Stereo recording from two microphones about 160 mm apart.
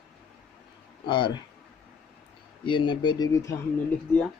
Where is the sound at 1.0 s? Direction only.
30° left (ahead or behind).